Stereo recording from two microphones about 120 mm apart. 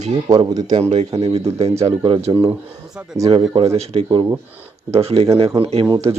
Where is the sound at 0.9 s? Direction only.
65° right (ahead or behind).